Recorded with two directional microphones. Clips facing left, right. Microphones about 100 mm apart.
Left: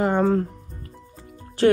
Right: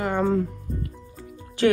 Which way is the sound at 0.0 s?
45° left (ahead or behind).